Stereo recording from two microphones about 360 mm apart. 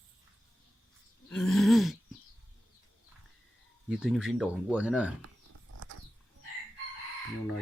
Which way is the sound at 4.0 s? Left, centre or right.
Centre.